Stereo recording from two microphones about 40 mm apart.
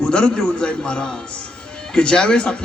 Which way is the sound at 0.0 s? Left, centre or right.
Left.